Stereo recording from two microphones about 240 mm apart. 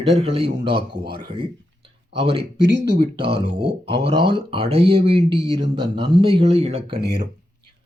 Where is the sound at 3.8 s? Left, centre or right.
Right.